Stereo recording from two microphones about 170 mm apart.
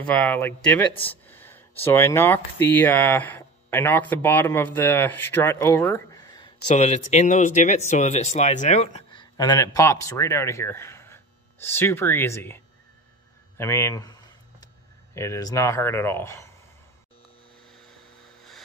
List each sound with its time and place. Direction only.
0.0 s speech: 5° left (ahead or behind); by 6.5 s 25° left (ahead or behind)
6.7 s speech: 45° left (ahead or behind)
9.1 s speech: 25° left (ahead or behind)
15.1 s speech: 20° left (ahead or behind)